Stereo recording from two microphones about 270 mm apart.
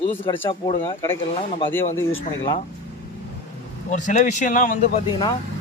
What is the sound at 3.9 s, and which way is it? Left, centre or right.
Speech, left.